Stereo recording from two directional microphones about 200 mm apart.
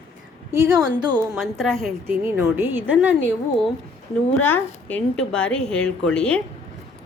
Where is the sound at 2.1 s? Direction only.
10° right (ahead or behind).